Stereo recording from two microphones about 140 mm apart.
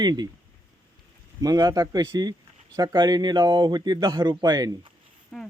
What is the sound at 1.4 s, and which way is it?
A man's voice, 30° right (ahead or behind).